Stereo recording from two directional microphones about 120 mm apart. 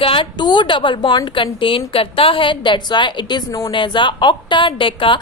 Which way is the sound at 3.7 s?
40° left (ahead or behind).